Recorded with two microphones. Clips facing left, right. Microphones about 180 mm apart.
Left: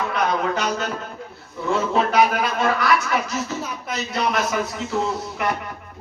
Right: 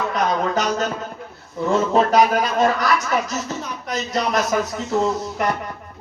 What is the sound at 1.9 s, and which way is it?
Speech, 40° right (ahead or behind).